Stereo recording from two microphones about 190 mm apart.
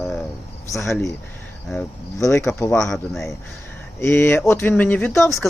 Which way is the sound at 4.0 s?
15° left (ahead or behind).